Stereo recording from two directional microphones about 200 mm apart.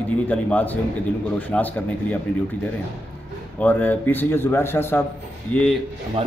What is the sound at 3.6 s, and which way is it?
Speech, 10° left (ahead or behind).